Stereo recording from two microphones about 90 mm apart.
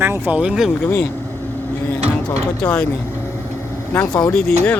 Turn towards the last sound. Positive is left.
turn(degrees=15)  # may be behind; listen again after turning